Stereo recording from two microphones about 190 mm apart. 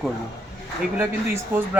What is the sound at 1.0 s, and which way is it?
Speech, 10° right (ahead or behind).